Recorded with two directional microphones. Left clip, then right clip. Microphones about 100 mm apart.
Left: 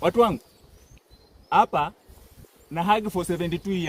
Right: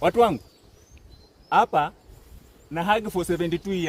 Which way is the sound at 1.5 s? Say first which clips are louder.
Even; 35° right (ahead or behind).